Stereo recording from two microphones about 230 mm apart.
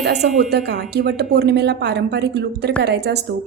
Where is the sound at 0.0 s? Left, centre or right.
Right.